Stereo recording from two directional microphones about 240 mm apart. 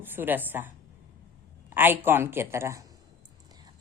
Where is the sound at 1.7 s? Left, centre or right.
Centre.